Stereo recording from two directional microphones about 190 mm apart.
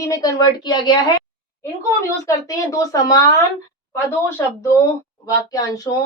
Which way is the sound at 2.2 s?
15° left (ahead or behind).